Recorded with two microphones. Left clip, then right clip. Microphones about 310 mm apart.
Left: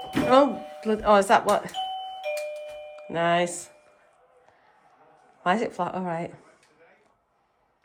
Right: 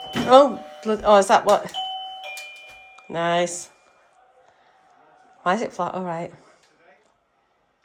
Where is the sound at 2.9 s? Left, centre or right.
Centre.